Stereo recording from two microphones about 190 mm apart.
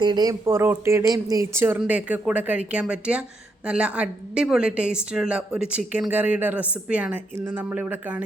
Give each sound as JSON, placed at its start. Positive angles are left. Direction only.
{"t": 0.0, "sound": "a woman's voice", "side_deg": -20}